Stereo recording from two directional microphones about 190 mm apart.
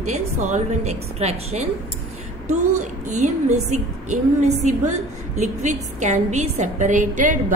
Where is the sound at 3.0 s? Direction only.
35° right (ahead or behind).